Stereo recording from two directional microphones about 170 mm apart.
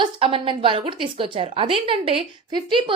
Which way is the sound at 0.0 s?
30° right (ahead or behind).